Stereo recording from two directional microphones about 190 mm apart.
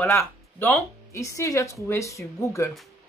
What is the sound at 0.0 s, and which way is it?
Speech, 10° left (ahead or behind).